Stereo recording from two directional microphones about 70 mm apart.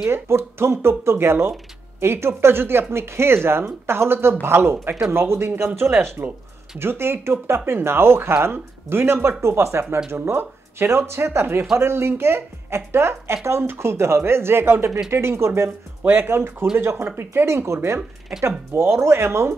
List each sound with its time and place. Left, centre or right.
0.1 s speech: right
16.0 s speech: right